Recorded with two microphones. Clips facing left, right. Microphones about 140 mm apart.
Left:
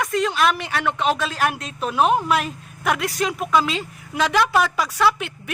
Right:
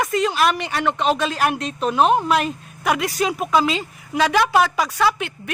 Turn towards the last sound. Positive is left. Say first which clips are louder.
# even
turn(degrees=0)  # may be behind; listen again after turning